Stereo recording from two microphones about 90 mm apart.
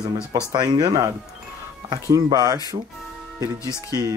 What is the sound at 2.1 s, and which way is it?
Speech, 40° right (ahead or behind).